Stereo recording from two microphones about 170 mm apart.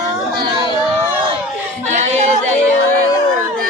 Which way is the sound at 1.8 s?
45° right (ahead or behind).